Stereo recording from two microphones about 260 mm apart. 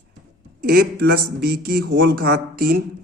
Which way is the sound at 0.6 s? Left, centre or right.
Right.